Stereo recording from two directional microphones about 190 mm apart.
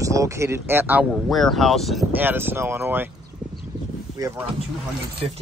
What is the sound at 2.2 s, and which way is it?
Speech, 10° right (ahead or behind).